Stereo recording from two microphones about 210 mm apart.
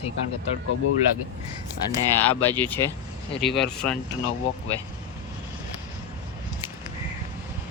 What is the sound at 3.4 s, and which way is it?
Speech, centre (ahead or behind).